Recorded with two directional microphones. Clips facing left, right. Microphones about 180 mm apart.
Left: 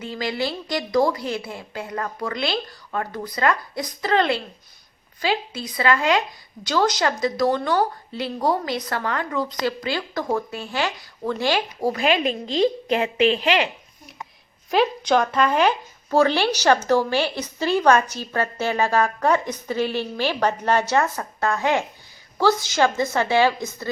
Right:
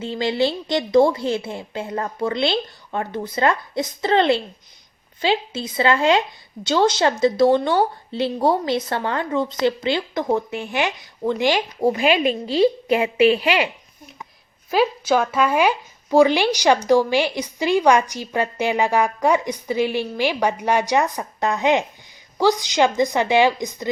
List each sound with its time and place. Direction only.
0.0 s speech: 25° right (ahead or behind)
12.5 s speech: 10° right (ahead or behind)
14.7 s speech: 5° right (ahead or behind)